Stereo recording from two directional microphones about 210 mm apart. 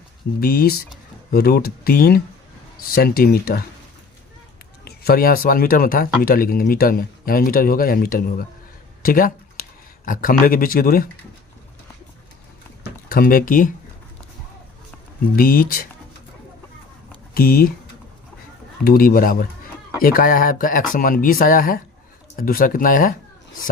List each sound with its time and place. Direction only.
0.3 s speech: 45° left (ahead or behind)
4.9 s speech: 45° left (ahead or behind)
13.1 s speech: 45° left (ahead or behind)
15.4 s speech: 45° left (ahead or behind)
17.3 s speech: 45° left (ahead or behind)
18.9 s speech: 45° left (ahead or behind)